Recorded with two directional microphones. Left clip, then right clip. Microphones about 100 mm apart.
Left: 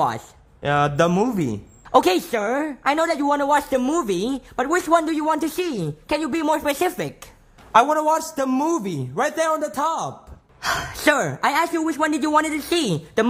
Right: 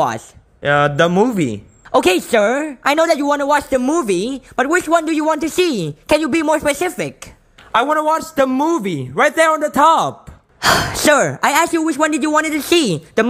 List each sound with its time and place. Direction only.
0.0 s speech: 20° right (ahead or behind)
2.3 s speech: 30° right (ahead or behind)
5.6 s a man's voice: 40° right (ahead or behind)
9.3 s a man's voice: 45° right (ahead or behind)
9.8 s speech: 65° right (ahead or behind)
11.1 s speech: 40° right (ahead or behind); by 12.5 s 20° right (ahead or behind)
12.5 s speech: 40° right (ahead or behind)